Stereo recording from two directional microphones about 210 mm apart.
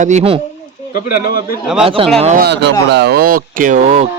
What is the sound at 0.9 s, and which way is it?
Speech, 45° left (ahead or behind).